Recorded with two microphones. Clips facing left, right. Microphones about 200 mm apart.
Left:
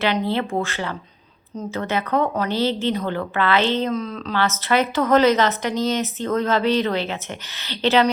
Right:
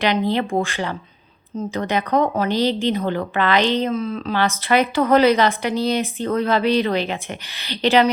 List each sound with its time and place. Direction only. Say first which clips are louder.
0.3 s a woman's voice: right 2 dB; 15° right (ahead or behind)